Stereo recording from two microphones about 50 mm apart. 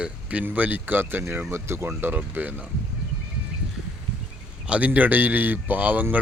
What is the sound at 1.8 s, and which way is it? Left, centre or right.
Speech, right.